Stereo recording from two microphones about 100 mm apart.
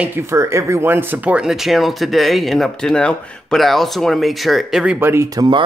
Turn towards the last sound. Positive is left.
turn(degrees=-50)  # may be behind; listen again after turning